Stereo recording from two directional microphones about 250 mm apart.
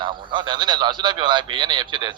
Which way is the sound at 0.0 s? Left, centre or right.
Centre.